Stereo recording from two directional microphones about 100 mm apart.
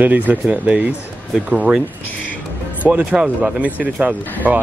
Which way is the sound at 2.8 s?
15° right (ahead or behind).